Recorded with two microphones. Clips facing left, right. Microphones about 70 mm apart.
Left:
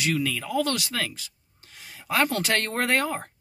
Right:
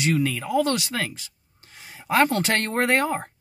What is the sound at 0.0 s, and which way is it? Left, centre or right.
Speech, right.